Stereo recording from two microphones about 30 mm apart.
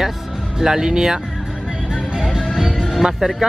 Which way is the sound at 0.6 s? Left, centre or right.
Centre.